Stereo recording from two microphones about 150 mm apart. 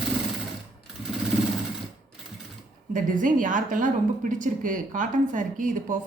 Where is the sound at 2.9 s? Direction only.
60° right (ahead or behind).